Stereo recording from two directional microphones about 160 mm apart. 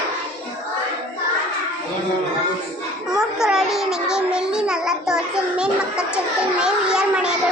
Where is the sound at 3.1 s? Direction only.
5° right (ahead or behind).